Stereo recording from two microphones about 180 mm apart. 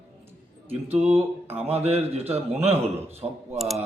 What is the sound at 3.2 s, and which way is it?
Speech, 15° right (ahead or behind).